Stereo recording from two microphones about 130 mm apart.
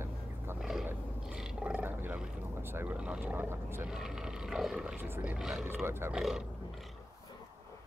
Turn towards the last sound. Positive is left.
turn(degrees=-5)  # may be behind; listen again after turning